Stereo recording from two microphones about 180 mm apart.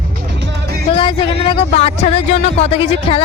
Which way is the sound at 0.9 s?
25° left (ahead or behind).